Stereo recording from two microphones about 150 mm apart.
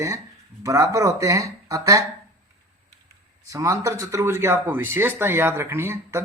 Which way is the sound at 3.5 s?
20° right (ahead or behind).